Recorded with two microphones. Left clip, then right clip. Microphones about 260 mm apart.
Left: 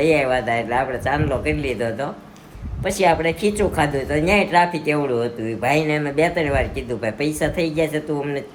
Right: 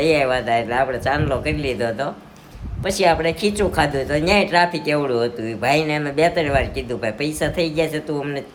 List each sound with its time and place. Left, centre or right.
0.0 s a woman's voice: centre